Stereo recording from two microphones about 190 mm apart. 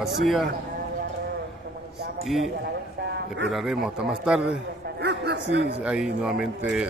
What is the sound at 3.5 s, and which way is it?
A man's voice, centre (ahead or behind).